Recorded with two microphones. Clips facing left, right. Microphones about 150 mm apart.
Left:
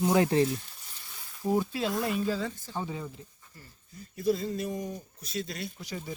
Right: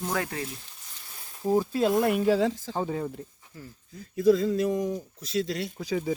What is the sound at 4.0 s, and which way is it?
Speech, 90° right.